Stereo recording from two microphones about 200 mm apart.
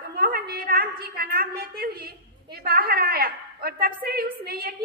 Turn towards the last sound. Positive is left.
turn(degrees=-50)  # may be behind; listen again after turning